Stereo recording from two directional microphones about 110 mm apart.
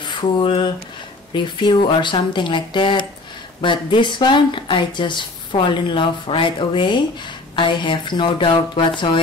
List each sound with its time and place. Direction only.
0.0 s speech: 45° left (ahead or behind)